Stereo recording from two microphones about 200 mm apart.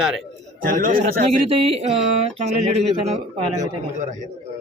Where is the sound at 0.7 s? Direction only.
45° right (ahead or behind).